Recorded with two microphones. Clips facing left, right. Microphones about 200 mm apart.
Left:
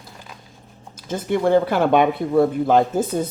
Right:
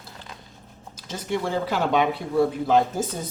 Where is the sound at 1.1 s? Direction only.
55° left (ahead or behind).